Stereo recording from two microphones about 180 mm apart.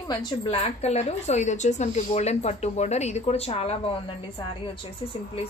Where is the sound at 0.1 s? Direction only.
25° left (ahead or behind).